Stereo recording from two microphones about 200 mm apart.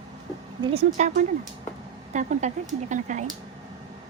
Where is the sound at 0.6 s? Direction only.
30° right (ahead or behind).